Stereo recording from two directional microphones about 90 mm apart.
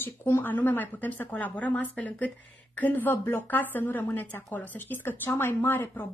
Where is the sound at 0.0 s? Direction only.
25° left (ahead or behind).